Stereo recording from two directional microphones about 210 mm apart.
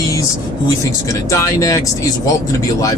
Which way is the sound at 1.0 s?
15° left (ahead or behind).